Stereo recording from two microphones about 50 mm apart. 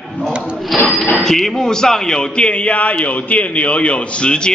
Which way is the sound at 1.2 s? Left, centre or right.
Centre.